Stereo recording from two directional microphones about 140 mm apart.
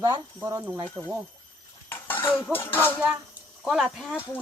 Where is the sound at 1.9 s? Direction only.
15° left (ahead or behind).